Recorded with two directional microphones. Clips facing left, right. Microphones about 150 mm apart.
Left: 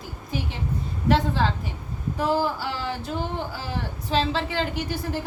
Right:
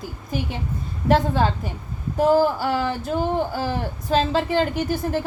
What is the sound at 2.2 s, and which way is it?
Female singing, 45° right (ahead or behind).